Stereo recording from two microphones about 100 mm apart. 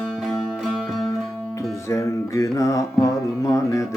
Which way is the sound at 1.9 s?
30° left (ahead or behind).